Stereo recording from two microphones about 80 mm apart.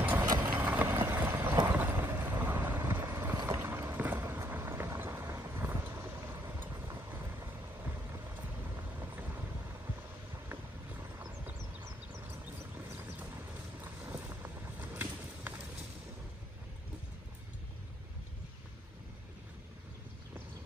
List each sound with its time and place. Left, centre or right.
0.4 s vehicle: right
1.7 s boat: right
3.9 s vehicle: right
10.5 s vehicle: right
13.7 s vehicle: right